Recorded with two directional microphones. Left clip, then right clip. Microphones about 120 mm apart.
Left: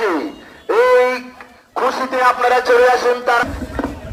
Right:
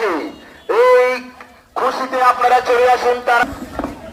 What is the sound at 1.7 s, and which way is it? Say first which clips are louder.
Speech: even; 25° left (ahead or behind).